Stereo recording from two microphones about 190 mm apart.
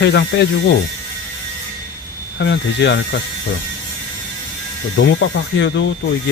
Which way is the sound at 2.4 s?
70° left (ahead or behind).